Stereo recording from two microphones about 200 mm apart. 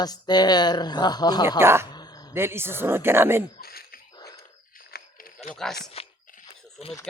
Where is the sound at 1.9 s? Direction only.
20° left (ahead or behind).